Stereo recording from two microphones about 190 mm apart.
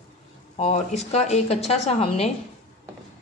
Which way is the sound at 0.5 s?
35° left (ahead or behind).